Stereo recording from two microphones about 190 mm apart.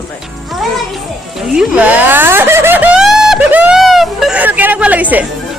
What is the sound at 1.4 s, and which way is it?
A child's voice, 5° right (ahead or behind).